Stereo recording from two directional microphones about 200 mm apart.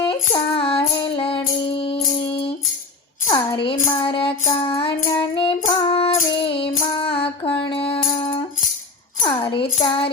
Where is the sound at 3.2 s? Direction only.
20° left (ahead or behind).